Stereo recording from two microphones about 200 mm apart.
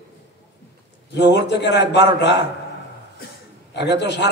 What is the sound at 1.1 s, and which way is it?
Speech, 60° left (ahead or behind).